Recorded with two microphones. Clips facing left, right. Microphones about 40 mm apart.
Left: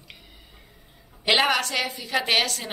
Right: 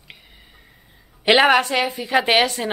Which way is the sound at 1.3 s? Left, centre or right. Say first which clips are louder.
Right 7 dB; right.